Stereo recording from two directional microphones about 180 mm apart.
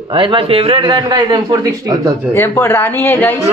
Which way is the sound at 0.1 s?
30° right (ahead or behind).